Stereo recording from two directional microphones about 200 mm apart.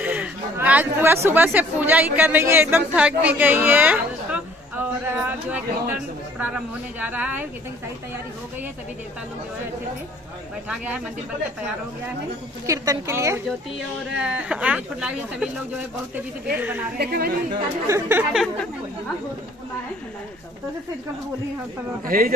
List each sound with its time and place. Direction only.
0.0 s speech: 10° right (ahead or behind)
12.6 s speech: 15° right (ahead or behind)
16.5 s speech: 10° right (ahead or behind)
17.0 s a man's voice: 50° right (ahead or behind)
17.5 s speech: 15° right (ahead or behind)
22.0 s a man's voice: 45° right (ahead or behind)